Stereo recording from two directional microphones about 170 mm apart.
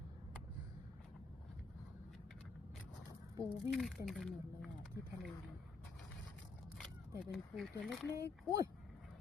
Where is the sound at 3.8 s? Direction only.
Centre (ahead or behind).